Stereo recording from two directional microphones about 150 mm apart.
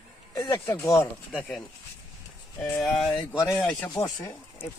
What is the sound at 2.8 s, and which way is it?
Speech, centre (ahead or behind).